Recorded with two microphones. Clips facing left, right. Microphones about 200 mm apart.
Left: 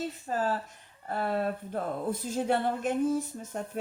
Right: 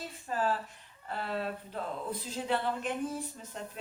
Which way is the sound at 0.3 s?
40° left (ahead or behind).